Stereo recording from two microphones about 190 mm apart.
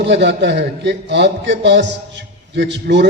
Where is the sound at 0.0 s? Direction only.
65° right (ahead or behind).